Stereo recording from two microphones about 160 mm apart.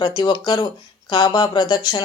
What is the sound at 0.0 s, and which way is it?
Speech, 25° left (ahead or behind).